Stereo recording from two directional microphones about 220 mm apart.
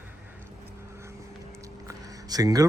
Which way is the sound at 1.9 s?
15° right (ahead or behind).